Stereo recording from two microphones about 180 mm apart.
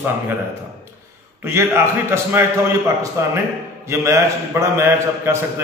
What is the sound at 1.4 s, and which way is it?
A man's voice, 15° right (ahead or behind).